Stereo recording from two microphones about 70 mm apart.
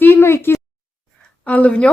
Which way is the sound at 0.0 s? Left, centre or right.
Left.